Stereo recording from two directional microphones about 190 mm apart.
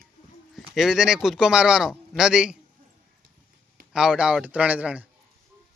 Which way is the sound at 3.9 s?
5° right (ahead or behind).